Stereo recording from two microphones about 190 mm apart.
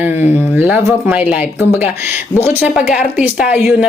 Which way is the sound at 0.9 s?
10° right (ahead or behind).